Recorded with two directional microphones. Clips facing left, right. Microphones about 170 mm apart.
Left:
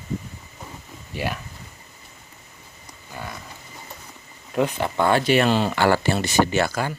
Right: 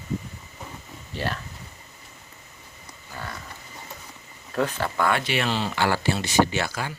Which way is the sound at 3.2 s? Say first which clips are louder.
Left 2 dB; 15° left (ahead or behind).